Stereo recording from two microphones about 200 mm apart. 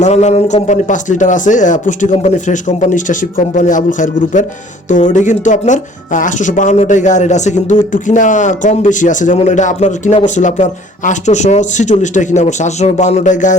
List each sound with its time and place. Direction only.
0.0 s speech: 35° left (ahead or behind)